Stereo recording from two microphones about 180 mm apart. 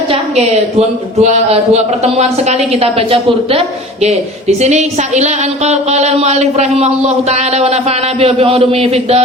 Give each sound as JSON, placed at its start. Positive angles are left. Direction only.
{"t": 0.1, "sound": "a woman's voice", "side_deg": -35}